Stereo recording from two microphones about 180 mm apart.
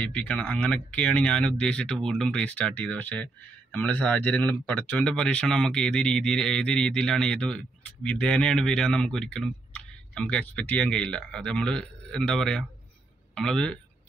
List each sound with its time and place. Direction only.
0.0 s speech: 5° left (ahead or behind)